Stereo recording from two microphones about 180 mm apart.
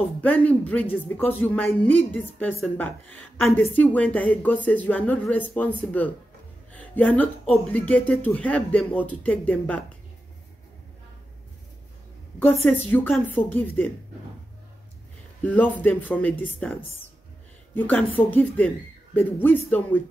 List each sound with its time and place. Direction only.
0.2 s speech: 10° left (ahead or behind)
6.7 s music: 10° left (ahead or behind)
7.6 s speech: 10° left (ahead or behind)
12.6 s speech: 10° left (ahead or behind)
15.4 s speech: 10° left (ahead or behind)
17.7 s speech: 10° left (ahead or behind)